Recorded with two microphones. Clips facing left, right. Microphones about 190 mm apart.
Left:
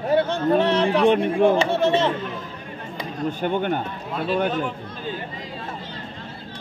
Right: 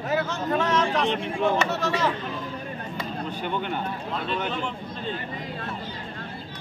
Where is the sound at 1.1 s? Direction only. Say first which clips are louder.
Left 8 dB; 55° left (ahead or behind).